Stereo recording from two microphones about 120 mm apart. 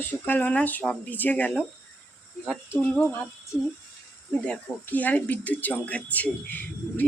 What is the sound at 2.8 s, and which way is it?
Speech, 10° left (ahead or behind).